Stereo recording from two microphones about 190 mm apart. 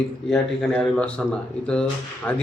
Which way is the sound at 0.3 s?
5° left (ahead or behind).